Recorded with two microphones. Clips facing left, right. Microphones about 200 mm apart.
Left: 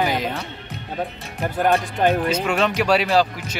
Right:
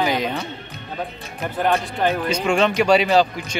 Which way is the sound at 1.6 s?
15° left (ahead or behind).